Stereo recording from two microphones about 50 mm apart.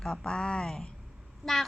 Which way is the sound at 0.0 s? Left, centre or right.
Centre.